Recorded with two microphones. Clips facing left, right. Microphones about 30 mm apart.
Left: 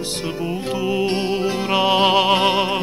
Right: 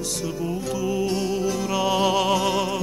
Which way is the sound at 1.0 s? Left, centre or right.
Left.